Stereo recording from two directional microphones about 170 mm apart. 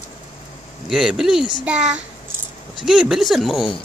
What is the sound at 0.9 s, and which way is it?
A child's voice, 5° right (ahead or behind).